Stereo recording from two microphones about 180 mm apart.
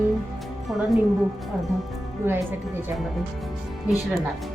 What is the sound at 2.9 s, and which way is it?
Speech, centre (ahead or behind).